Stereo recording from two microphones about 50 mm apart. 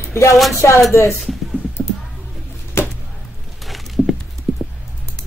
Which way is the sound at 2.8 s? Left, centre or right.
Left.